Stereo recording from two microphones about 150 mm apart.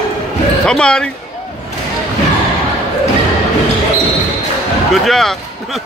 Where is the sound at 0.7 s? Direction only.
5° left (ahead or behind).